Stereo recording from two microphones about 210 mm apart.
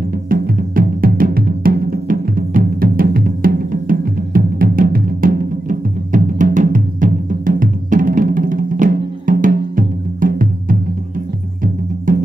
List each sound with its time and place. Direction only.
0.1 s music: 40° right (ahead or behind)